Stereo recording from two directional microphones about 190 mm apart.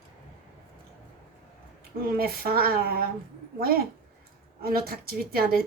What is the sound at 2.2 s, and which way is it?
A woman's voice, 55° right (ahead or behind).